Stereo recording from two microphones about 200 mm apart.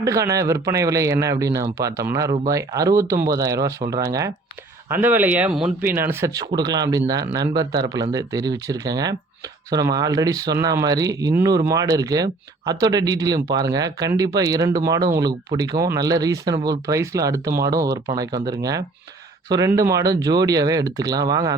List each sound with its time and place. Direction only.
0.0 s speech: 15° right (ahead or behind)